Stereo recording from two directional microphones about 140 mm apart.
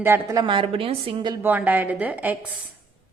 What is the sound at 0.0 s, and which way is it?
Speech, 15° right (ahead or behind).